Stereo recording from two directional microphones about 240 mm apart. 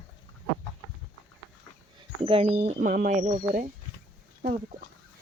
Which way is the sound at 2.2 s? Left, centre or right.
Right.